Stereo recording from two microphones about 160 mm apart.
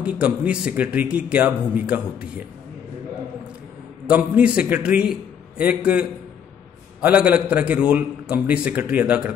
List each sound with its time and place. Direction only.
0.0 s a man's voice: 10° right (ahead or behind)
4.1 s a man's voice: 10° right (ahead or behind)